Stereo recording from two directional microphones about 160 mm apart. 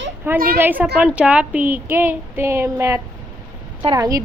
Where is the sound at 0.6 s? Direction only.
10° right (ahead or behind).